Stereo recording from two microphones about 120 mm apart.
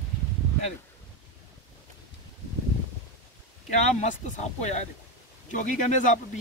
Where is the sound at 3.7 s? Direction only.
80° left.